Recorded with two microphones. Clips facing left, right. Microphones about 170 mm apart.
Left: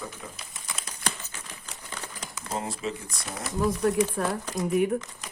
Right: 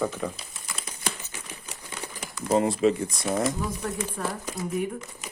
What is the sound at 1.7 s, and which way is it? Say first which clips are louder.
Crumpling: right 1 dB; 5° right (ahead or behind).